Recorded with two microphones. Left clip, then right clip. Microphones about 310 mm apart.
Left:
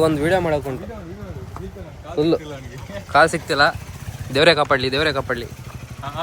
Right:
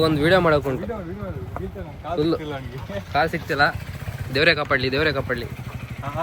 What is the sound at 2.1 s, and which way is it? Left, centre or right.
Speech, centre.